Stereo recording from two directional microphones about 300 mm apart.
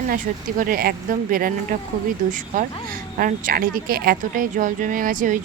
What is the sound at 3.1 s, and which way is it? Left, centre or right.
A woman's voice, right.